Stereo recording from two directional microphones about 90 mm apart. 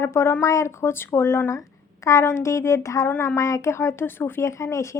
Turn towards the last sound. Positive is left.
turn(degrees=35)  # may be behind; listen again after turning